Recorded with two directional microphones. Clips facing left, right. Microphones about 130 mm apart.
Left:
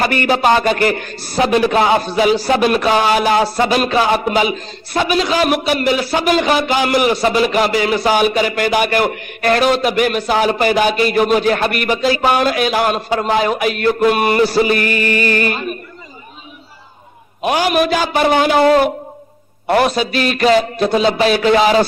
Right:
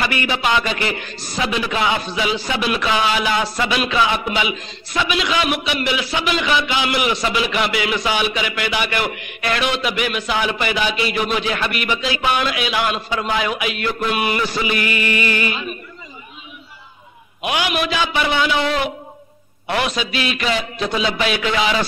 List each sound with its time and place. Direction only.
0.0 s a man's voice: 45° left (ahead or behind)
17.4 s a man's voice: 40° left (ahead or behind)